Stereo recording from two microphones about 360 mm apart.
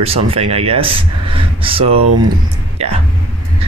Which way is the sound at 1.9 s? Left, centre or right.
Right.